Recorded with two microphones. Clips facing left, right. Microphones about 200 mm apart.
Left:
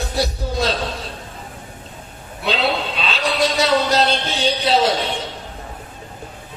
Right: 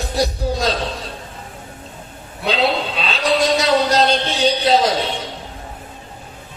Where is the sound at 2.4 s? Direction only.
35° right (ahead or behind).